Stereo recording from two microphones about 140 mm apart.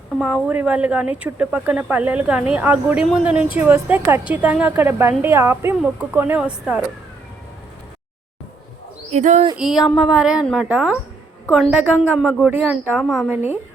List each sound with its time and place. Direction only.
0.2 s speech: 5° right (ahead or behind)
9.0 s speech: 55° right (ahead or behind)
9.6 s a woman's voice: centre (ahead or behind)
13.0 s a woman's voice: centre (ahead or behind)
13.3 s speech: 15° right (ahead or behind)